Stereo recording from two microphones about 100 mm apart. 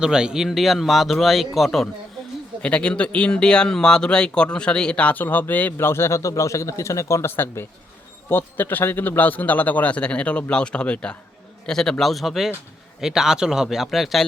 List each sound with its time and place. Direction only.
0.0 s a man's voice: 10° right (ahead or behind)
2.6 s a man's voice: 10° left (ahead or behind)